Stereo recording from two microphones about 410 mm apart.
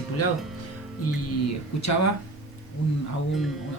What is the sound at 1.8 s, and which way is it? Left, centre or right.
Speech, left.